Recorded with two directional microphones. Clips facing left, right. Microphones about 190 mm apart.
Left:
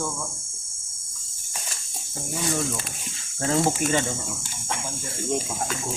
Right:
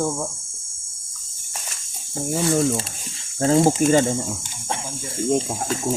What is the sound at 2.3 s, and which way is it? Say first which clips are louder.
Speech: right 8 dB; 30° right (ahead or behind).